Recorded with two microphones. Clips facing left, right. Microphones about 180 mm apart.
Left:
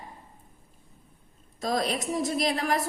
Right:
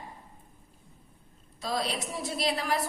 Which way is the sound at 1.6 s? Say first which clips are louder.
Left 4 dB; 45° left (ahead or behind).